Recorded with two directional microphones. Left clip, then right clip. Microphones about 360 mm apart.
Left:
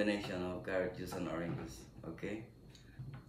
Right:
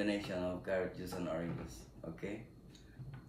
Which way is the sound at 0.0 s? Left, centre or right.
Centre.